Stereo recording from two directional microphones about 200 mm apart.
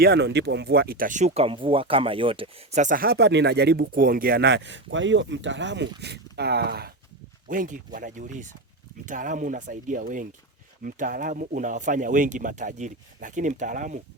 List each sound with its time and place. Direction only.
0.0 s speech: 55° right (ahead or behind)
7.4 s speech: 40° right (ahead or behind)